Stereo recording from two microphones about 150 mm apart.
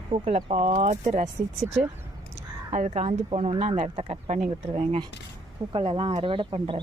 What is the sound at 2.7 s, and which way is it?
Speech, 50° right (ahead or behind).